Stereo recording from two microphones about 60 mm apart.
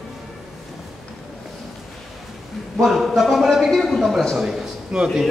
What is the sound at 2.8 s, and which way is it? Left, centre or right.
A man's voice, centre.